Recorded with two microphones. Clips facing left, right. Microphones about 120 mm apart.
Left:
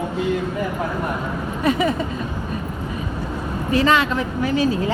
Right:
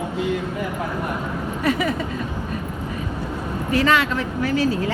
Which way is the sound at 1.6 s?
25° left (ahead or behind).